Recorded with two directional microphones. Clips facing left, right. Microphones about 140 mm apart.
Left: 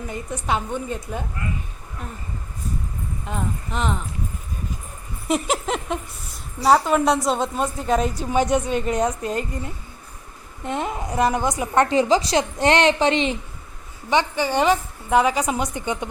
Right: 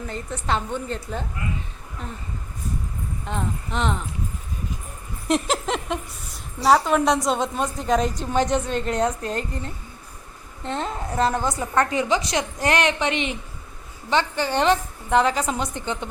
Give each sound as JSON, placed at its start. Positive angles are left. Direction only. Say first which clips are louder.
{"t": 0.1, "sound": "a woman's voice", "louder": "left 1 dB", "side_deg": 10}
{"t": 3.2, "sound": "a woman's voice", "louder": "even", "side_deg": 5}
{"t": 5.3, "sound": "a woman's voice", "louder": "even", "side_deg": 5}
{"t": 11.9, "sound": "a woman's voice", "louder": "left 4 dB", "side_deg": 35}
{"t": 14.1, "sound": "a woman's voice", "louder": "left 2 dB", "side_deg": 15}